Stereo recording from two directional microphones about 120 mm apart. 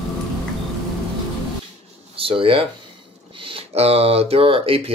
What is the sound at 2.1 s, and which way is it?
Speech, 50° right (ahead or behind).